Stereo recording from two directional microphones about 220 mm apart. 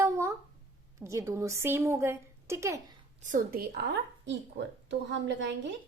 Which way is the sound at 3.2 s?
40° right (ahead or behind).